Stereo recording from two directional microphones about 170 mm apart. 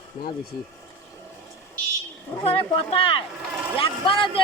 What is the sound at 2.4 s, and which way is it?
A man's voice, 35° left (ahead or behind).